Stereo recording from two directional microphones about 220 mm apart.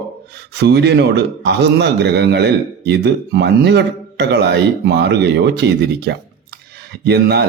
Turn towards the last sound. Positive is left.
turn(degrees=-45)  # may be behind; listen again after turning